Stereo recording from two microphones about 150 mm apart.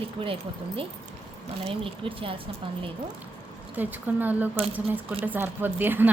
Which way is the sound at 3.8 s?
10° right (ahead or behind).